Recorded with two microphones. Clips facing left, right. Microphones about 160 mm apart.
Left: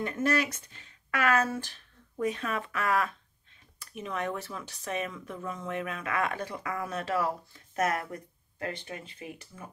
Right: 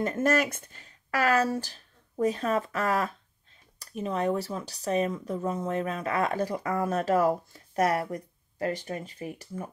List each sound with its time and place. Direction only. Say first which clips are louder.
0.0 s speech: right 3 dB; 45° right (ahead or behind)